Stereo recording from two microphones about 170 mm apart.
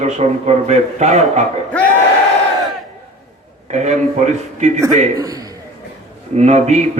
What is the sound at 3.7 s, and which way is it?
A man's voice, 45° right (ahead or behind).